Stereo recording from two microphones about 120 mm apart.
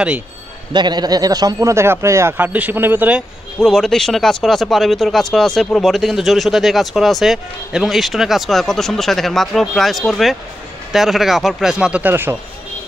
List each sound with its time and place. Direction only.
0.7 s speech: 35° right (ahead or behind); by 3.3 s 10° right (ahead or behind)
3.5 s speech: 5° left (ahead or behind); by 12.4 s 15° right (ahead or behind)